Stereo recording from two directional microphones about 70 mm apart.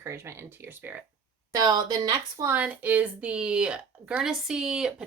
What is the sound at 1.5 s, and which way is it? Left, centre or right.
Speech, right.